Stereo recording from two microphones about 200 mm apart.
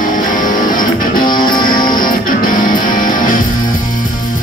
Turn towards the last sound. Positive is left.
turn(degrees=40)  # may be behind; listen again after turning